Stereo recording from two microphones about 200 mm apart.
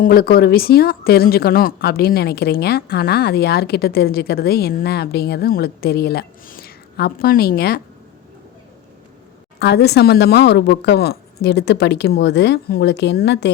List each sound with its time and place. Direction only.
0.0 s speech: 50° left (ahead or behind)
9.6 s speech: 55° left (ahead or behind)